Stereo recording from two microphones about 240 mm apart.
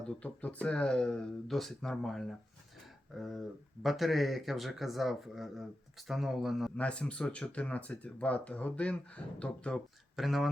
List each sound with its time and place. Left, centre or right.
0.2 s speech: centre
2.8 s a sound: centre
3.8 s speech: centre